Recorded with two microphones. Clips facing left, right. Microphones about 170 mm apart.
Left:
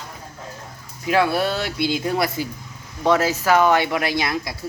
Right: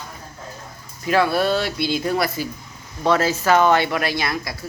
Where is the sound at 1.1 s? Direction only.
15° left (ahead or behind).